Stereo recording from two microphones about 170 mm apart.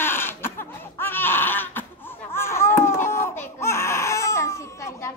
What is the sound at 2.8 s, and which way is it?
Baby cry, 15° left (ahead or behind).